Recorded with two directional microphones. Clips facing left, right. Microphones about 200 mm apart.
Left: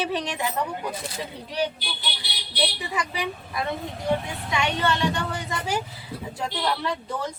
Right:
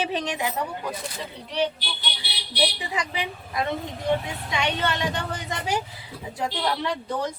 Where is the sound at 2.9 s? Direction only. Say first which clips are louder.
Left 1 dB; 20° right (ahead or behind).